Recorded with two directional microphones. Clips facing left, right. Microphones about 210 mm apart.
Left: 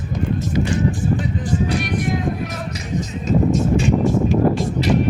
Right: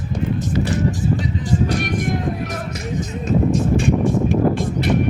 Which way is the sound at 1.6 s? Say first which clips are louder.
Even; 45° right (ahead or behind).